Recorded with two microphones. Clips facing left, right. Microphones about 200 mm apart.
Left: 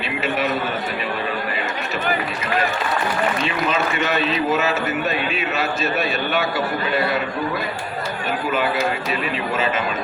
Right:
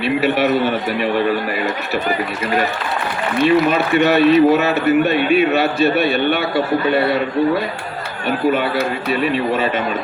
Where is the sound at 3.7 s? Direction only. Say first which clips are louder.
Right 7 dB; 60° right (ahead or behind).